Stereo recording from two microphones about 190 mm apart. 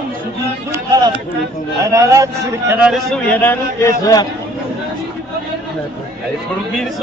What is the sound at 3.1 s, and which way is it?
A man's voice, 10° left (ahead or behind).